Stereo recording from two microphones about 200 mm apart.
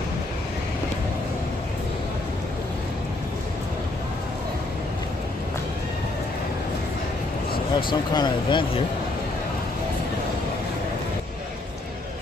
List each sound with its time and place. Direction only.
7.7 s speech: 20° left (ahead or behind)